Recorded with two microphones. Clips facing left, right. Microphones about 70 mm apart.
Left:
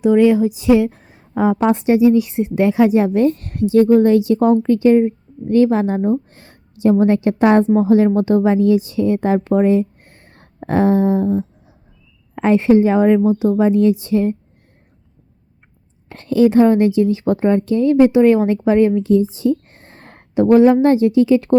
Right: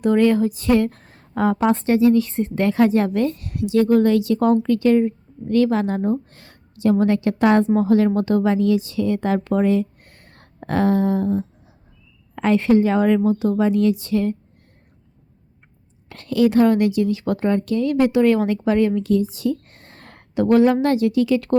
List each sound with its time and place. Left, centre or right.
0.0 s a woman's voice: centre
3.3 s a woman's voice: left
3.8 s a woman's voice: left
16.0 s a woman's voice: left